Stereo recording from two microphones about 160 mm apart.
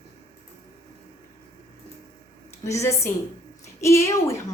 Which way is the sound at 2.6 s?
20° left (ahead or behind).